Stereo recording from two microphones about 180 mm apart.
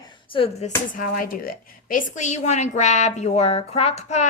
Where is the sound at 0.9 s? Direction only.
50° left (ahead or behind).